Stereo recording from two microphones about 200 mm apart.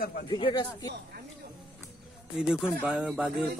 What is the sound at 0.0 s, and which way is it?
Speech, 50° left (ahead or behind).